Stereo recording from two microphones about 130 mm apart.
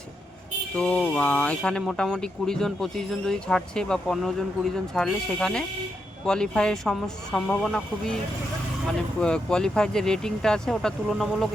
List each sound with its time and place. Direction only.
0.8 s speech: 10° left (ahead or behind)